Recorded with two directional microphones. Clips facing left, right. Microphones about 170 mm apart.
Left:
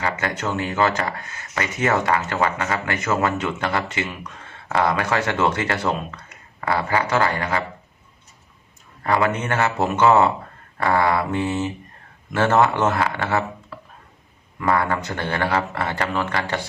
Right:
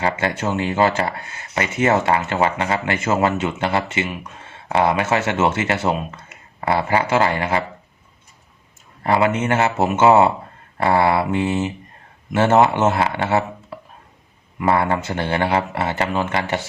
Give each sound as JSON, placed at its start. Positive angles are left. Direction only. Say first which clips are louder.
{"t": 0.0, "sound": "speech", "louder": "right 3 dB", "side_deg": -25}
{"t": 9.2, "sound": "speech", "louder": "right 3 dB", "side_deg": -25}